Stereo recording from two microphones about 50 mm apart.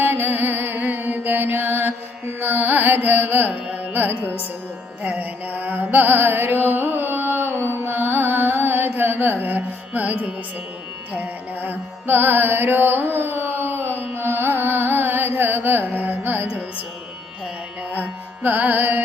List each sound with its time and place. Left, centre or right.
0.0 s music: right
14.2 s carnatic music: right
17.9 s carnatic music: right